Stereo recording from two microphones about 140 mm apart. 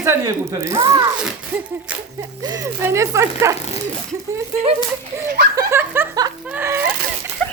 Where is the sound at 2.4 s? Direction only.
25° right (ahead or behind).